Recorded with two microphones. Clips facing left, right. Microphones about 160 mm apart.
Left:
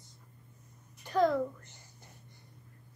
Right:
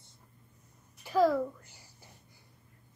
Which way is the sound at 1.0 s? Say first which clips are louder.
Right 2 dB; 5° right (ahead or behind).